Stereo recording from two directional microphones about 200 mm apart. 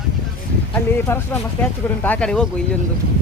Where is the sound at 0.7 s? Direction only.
10° left (ahead or behind).